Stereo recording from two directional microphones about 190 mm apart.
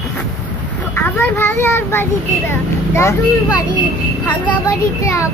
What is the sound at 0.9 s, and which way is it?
A child's voice, 10° left (ahead or behind).